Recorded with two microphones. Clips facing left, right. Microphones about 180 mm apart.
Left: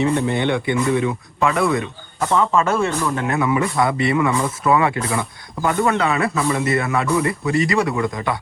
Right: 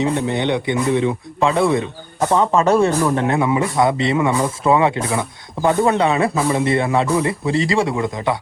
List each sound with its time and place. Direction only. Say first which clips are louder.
0.0 s a man's voice: even; 20° right (ahead or behind)